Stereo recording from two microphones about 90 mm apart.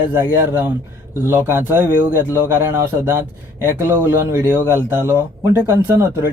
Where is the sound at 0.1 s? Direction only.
25° right (ahead or behind).